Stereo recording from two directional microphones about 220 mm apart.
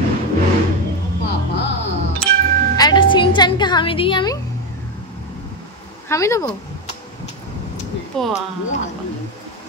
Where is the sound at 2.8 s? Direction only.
20° left (ahead or behind).